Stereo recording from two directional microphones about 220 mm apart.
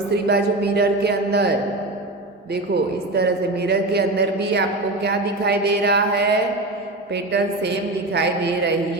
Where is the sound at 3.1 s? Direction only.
50° right (ahead or behind).